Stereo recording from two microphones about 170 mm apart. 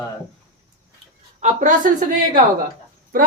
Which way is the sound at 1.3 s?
45° right (ahead or behind).